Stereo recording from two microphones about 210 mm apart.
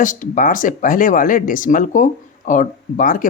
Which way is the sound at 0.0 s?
40° left (ahead or behind).